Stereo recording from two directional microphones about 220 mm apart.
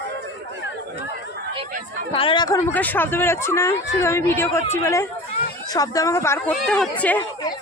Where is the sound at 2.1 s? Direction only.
25° left (ahead or behind).